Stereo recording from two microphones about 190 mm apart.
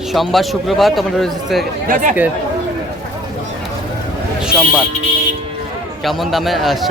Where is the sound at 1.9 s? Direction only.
50° right (ahead or behind).